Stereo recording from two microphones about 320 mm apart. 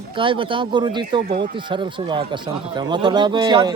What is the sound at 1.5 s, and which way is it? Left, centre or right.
A man's voice, centre.